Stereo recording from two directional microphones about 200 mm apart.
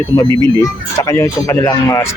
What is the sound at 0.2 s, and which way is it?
Speech, 15° left (ahead or behind).